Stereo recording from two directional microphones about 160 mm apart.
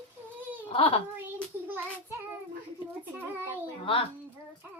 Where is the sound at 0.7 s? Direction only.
35° left (ahead or behind).